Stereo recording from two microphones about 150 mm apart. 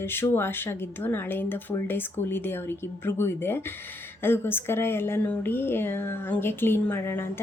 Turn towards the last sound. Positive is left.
turn(degrees=15)  # may be behind; listen again after turning